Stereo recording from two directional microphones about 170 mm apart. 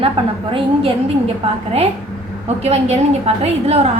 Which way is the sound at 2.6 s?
40° right (ahead or behind).